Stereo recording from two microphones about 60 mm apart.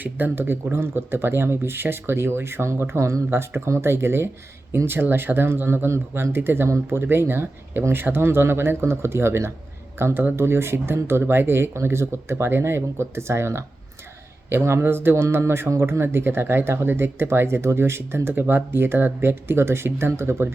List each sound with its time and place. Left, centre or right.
0.0 s speech: right
3.2 s speech: right